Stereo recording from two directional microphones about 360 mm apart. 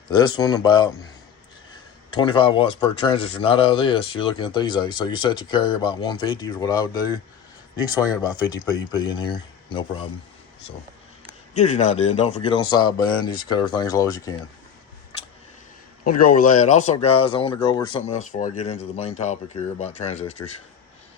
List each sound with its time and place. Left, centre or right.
0.1 s speech: centre
2.1 s speech: centre
11.5 s speech: centre
16.0 s speech: left